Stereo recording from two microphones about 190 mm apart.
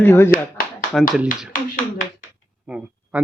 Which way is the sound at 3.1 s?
10° right (ahead or behind).